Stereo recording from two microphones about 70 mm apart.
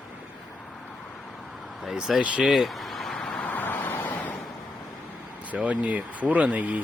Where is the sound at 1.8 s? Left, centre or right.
Centre.